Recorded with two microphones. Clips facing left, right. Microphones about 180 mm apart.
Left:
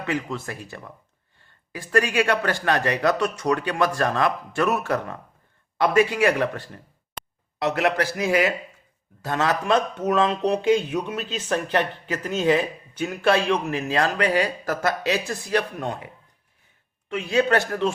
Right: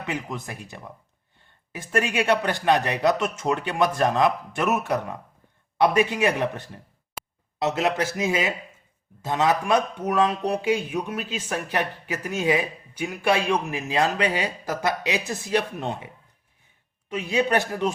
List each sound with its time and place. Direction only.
0.0 s speech: 20° right (ahead or behind)
7.2 s a sound: 5° right (ahead or behind)
7.6 s speech: 20° right (ahead or behind)
17.1 s speech: 20° right (ahead or behind)